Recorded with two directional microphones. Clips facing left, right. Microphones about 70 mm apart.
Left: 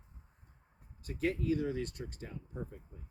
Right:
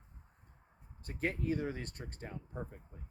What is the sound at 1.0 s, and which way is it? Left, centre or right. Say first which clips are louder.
Speech: left 3 dB; right.